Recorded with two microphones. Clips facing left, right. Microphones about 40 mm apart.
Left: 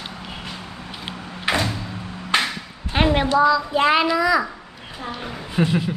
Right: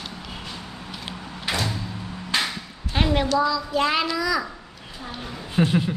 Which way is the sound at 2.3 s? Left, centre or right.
Left.